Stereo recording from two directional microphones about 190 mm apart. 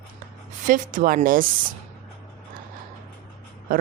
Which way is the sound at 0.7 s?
45° right (ahead or behind).